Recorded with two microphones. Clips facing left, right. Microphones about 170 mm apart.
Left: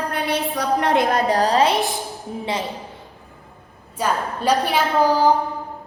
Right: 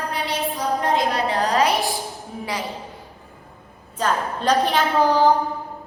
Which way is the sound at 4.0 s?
10° left (ahead or behind).